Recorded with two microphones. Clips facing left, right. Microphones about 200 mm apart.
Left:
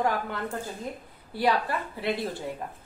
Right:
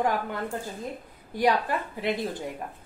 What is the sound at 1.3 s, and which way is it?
Speech, 15° right (ahead or behind).